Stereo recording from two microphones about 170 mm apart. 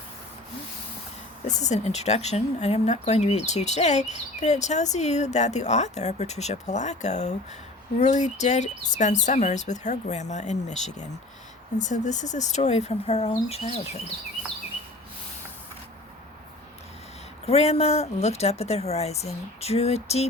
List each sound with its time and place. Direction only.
1.5 s speech: 45° left (ahead or behind)
17.4 s speech: 40° left (ahead or behind)